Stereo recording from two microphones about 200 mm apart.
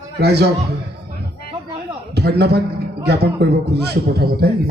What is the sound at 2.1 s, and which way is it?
Speech, 55° right (ahead or behind).